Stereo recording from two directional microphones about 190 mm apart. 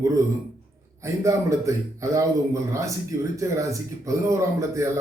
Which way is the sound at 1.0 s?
15° right (ahead or behind).